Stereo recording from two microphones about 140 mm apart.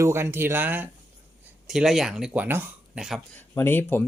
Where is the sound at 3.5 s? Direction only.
15° left (ahead or behind).